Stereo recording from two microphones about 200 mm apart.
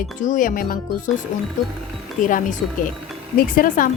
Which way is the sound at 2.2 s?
40° left (ahead or behind).